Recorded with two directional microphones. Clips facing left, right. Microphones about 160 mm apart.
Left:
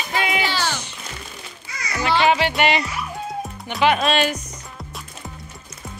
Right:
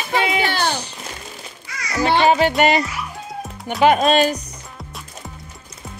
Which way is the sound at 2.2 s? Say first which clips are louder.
Right 3 dB; 40° right (ahead or behind).